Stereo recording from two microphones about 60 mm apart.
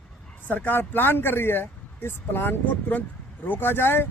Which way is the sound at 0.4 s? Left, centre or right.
Left.